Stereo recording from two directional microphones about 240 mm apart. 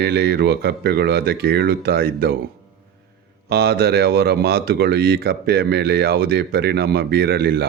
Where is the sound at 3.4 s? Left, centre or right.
Right.